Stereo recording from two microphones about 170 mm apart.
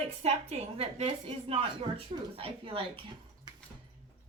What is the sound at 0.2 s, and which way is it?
A woman's voice, 40° right (ahead or behind).